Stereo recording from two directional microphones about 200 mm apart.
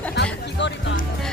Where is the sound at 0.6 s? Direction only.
60° left (ahead or behind).